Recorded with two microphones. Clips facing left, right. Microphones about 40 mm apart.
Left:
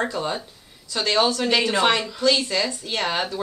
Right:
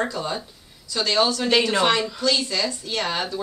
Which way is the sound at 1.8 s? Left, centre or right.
Left.